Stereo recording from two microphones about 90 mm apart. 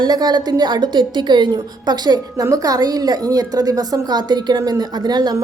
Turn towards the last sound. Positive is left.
turn(degrees=-50)  # may be behind; listen again after turning